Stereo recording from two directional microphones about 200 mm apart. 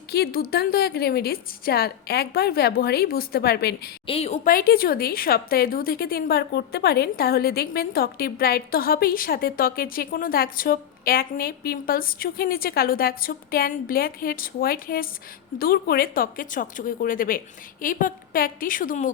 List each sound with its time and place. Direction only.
0.1 s a woman's voice: 50° left (ahead or behind)
4.0 s a woman's voice: 30° left (ahead or behind)
4.4 s a woman's voice: 45° left (ahead or behind)